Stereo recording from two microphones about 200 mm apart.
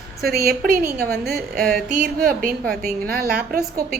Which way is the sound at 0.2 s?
50° right (ahead or behind).